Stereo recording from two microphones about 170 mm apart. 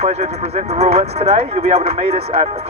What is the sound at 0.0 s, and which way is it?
Speech, 40° right (ahead or behind).